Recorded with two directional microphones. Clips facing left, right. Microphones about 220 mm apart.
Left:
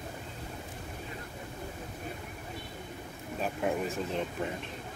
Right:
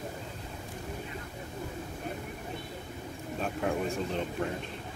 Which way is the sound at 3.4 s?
Centre (ahead or behind).